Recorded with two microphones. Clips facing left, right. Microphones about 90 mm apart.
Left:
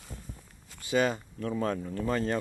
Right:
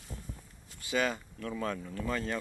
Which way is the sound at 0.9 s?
25° left (ahead or behind).